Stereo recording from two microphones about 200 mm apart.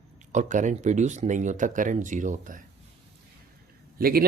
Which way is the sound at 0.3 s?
40° right (ahead or behind).